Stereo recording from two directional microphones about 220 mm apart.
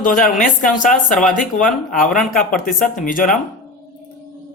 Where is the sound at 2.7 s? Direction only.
35° left (ahead or behind).